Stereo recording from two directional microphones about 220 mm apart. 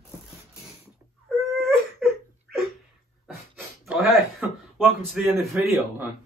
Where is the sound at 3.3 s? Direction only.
Centre (ahead or behind).